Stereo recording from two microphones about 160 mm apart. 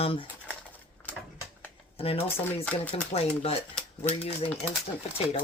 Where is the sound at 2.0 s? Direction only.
35° left (ahead or behind).